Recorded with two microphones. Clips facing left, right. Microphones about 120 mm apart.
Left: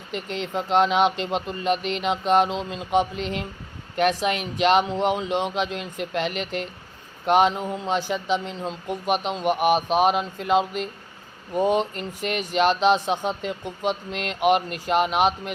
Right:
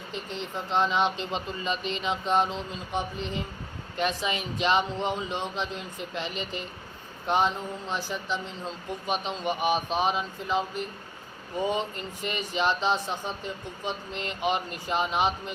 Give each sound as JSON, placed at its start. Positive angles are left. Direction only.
{"t": 0.1, "sound": "speech", "side_deg": 80}
{"t": 3.9, "sound": "speech", "side_deg": 65}
{"t": 11.5, "sound": "speech", "side_deg": 65}